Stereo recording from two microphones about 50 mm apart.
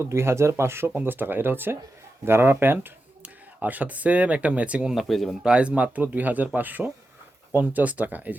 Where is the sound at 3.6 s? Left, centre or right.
Right.